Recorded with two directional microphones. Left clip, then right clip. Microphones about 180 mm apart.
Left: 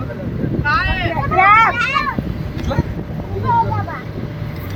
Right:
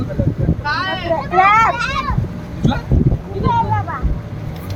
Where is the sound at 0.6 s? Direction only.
75° right (ahead or behind).